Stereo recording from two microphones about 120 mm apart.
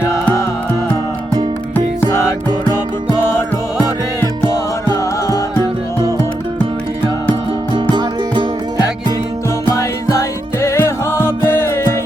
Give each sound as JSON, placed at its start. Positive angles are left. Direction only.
{"t": 1.7, "sound": "music", "side_deg": 15}
{"t": 4.4, "sound": "music", "side_deg": 25}
{"t": 7.7, "sound": "music", "side_deg": -40}
{"t": 9.6, "sound": "music", "side_deg": 25}